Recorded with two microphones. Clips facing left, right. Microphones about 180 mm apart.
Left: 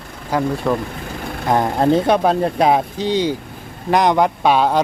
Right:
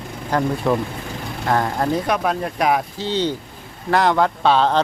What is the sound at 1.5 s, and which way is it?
Speech, 20° left (ahead or behind).